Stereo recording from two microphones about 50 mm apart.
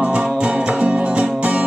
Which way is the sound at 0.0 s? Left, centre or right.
Right.